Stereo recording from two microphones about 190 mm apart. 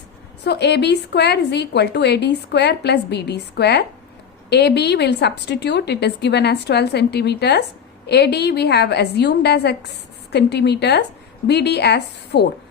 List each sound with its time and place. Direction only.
0.4 s a woman's voice: 60° left (ahead or behind)